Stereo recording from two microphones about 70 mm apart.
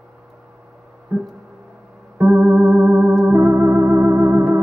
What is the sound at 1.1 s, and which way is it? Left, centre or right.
Music, right.